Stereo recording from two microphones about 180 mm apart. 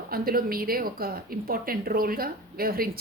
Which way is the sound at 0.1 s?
55° right (ahead or behind).